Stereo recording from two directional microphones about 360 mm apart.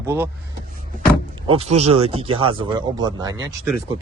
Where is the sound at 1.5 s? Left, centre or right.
Centre.